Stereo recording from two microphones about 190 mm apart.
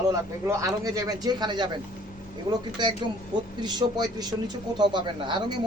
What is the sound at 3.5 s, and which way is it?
Speech, 20° right (ahead or behind).